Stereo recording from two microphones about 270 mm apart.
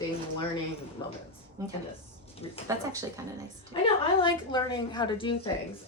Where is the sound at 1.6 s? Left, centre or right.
Centre.